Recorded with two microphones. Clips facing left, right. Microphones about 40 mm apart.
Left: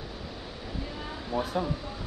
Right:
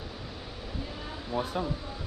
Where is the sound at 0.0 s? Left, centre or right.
Centre.